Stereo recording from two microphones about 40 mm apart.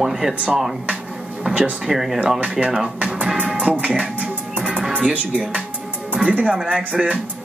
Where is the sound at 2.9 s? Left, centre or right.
Right.